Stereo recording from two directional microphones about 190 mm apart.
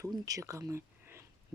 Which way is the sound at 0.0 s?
15° right (ahead or behind).